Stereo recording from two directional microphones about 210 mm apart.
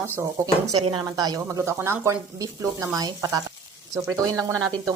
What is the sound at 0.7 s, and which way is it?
Speech, 25° right (ahead or behind).